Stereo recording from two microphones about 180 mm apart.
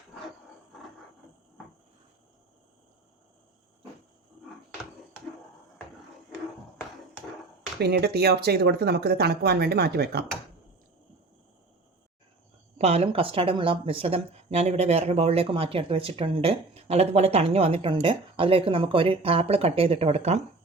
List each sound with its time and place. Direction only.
7.8 s speech: 65° right (ahead or behind)
12.8 s speech: 35° right (ahead or behind)